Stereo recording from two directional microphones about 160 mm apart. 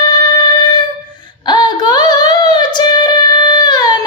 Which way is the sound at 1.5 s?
25° left (ahead or behind).